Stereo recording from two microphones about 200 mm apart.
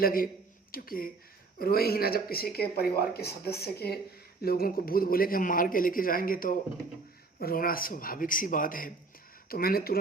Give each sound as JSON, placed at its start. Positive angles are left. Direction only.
{"t": 0.0, "sound": "speech", "side_deg": 45}